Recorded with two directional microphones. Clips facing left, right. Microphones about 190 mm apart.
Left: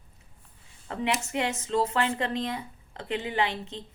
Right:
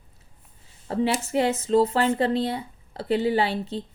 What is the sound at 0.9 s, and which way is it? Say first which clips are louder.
Speech: right 5 dB; 30° right (ahead or behind).